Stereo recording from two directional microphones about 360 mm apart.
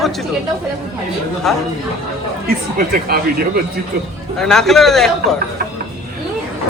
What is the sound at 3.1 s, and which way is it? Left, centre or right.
Speech, right.